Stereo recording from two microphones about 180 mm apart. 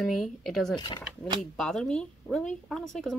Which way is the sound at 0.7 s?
25° left (ahead or behind).